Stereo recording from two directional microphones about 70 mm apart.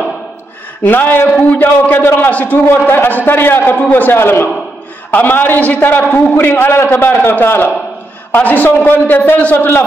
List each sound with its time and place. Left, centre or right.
0.8 s a man's voice: left